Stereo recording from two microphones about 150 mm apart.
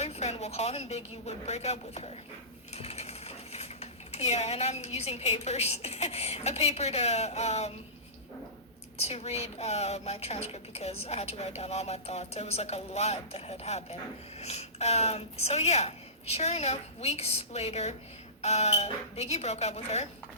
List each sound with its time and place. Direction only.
0.0 s a woman's voice: 45° left (ahead or behind)
2.7 s dishes: 45° left (ahead or behind)
9.0 s a woman's voice: 45° left (ahead or behind)